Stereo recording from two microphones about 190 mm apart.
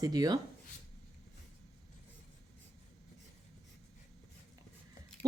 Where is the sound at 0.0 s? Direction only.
20° right (ahead or behind).